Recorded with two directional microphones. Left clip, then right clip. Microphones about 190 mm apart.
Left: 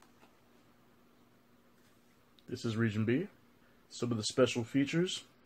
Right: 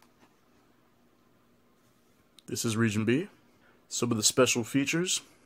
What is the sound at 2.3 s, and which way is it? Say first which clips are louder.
Speech: right 6 dB; 45° right (ahead or behind).